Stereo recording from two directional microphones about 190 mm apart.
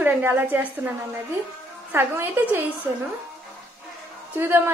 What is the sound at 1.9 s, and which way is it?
Speech, 10° right (ahead or behind).